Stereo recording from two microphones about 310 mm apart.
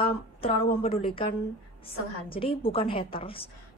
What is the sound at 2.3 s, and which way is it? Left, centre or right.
A woman's voice, centre.